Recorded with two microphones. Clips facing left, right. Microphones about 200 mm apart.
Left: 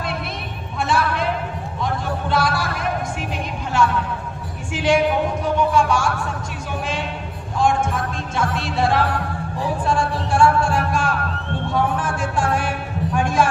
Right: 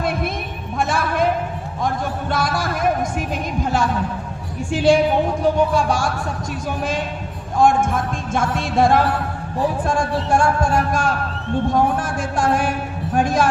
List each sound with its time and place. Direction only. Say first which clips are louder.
0.0 s music: right 5 dB; 50° right (ahead or behind)
4.7 s a woman's voice: right 3 dB; 35° right (ahead or behind)
7.5 s music: right 4 dB; 50° right (ahead or behind)
13.1 s a sound: right 2 dB; 40° right (ahead or behind)